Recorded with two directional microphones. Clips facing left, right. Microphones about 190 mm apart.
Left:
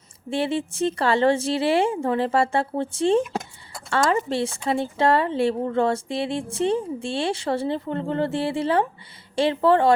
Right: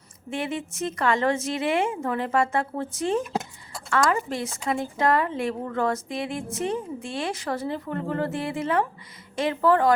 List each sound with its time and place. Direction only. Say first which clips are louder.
0.3 s a woman's voice: left 5 dB; 30° left (ahead or behind)